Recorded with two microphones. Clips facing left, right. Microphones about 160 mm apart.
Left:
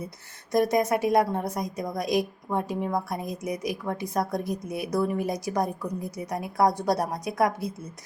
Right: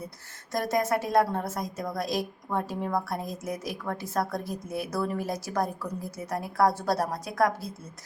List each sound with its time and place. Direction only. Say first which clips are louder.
0.5 s a woman's voice: left 4 dB; 20° left (ahead or behind)